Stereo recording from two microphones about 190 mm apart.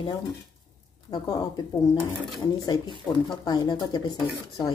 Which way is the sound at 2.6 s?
20° left (ahead or behind).